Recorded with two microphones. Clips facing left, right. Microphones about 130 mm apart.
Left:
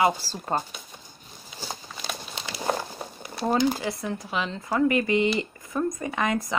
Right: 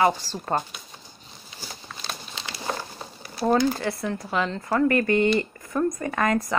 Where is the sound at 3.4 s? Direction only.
20° left (ahead or behind).